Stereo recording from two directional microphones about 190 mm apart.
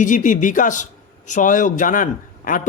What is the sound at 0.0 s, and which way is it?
A man's voice, 45° left (ahead or behind).